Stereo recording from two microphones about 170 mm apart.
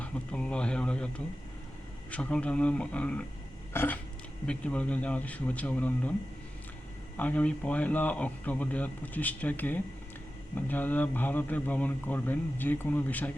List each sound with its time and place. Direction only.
0.0 s speech: 5° left (ahead or behind)
3.7 s a sound: 10° left (ahead or behind)
4.4 s speech: 5° left (ahead or behind)
7.2 s speech: 10° left (ahead or behind)